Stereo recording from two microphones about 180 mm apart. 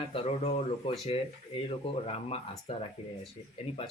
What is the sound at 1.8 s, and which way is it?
Speech, 35° left (ahead or behind).